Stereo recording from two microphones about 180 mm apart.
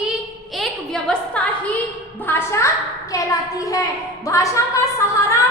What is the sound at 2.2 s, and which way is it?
Speech, 15° left (ahead or behind).